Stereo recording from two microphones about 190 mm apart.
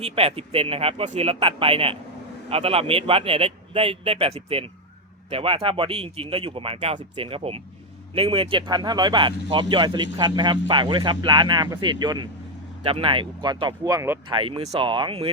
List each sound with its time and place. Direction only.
0.0 s a man's voice: 30° right (ahead or behind); by 14.2 s 15° right (ahead or behind)
14.3 s speech: 25° right (ahead or behind)